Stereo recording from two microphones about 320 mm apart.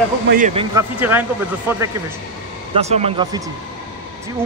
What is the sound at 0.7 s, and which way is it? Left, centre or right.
Speech, centre.